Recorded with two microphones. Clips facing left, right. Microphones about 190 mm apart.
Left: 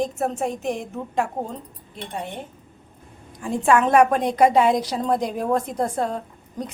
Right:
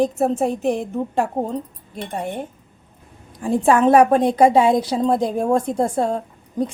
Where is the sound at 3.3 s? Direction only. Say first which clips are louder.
Right 3 dB; 35° right (ahead or behind).